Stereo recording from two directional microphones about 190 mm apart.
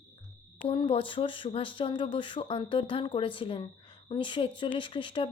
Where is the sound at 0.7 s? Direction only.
30° left (ahead or behind).